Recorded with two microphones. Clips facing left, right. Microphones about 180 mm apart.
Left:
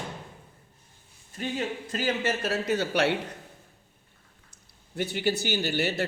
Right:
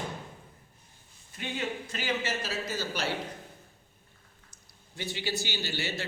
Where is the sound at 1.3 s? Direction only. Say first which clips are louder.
Left 4 dB; 40° left (ahead or behind).